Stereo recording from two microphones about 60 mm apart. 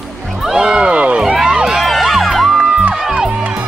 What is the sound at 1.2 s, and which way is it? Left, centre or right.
Music, centre.